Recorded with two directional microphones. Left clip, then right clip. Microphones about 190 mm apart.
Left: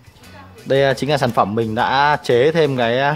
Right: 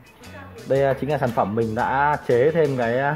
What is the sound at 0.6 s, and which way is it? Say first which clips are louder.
Speech: left 4 dB; 50° left (ahead or behind).